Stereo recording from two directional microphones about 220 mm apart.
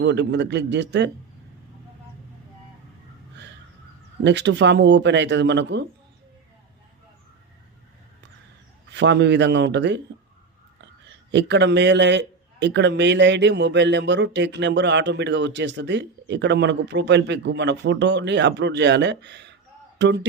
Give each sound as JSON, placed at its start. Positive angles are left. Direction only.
{"t": 0.0, "sound": "a man's voice", "side_deg": -50}
{"t": 4.2, "sound": "a man's voice", "side_deg": -50}
{"t": 8.9, "sound": "a man's voice", "side_deg": -50}
{"t": 11.3, "sound": "a man's voice", "side_deg": -55}